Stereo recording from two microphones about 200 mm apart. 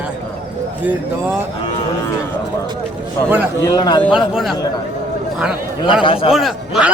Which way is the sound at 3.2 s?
10° right (ahead or behind).